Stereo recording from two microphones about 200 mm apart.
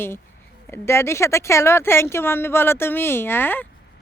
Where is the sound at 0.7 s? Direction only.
10° left (ahead or behind).